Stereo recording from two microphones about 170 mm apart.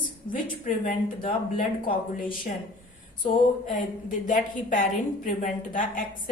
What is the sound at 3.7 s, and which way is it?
A woman's voice, 50° left (ahead or behind).